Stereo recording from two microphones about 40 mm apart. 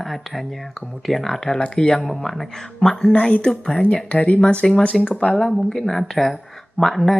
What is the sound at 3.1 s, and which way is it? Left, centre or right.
Speech, left.